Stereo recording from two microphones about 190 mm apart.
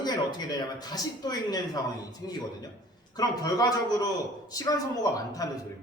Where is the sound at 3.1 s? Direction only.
20° left (ahead or behind).